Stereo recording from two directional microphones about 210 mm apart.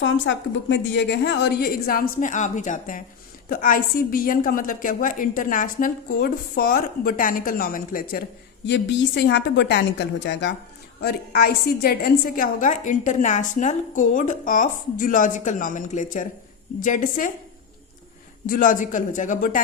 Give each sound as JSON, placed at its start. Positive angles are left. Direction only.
{"t": 0.0, "sound": "a woman's voice", "side_deg": 55}
{"t": 8.6, "sound": "a woman's voice", "side_deg": 55}
{"t": 11.0, "sound": "a woman's voice", "side_deg": 45}
{"t": 18.4, "sound": "a woman's voice", "side_deg": 40}